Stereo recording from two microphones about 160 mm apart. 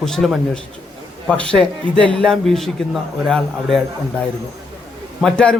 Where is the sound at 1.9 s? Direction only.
30° right (ahead or behind).